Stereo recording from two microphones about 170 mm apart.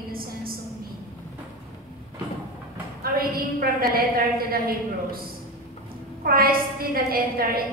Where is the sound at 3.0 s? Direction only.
60° right (ahead or behind).